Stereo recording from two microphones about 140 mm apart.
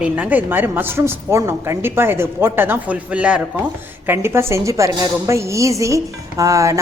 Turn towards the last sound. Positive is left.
turn(degrees=-25)  # may be behind; listen again after turning